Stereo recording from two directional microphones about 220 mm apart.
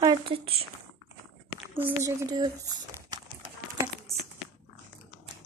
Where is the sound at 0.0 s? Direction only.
20° right (ahead or behind).